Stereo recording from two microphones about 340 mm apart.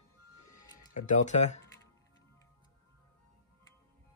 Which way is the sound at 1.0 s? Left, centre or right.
Left.